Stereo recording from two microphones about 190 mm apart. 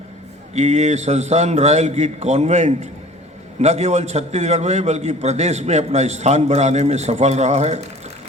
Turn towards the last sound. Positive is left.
turn(degrees=-35)  # may be behind; listen again after turning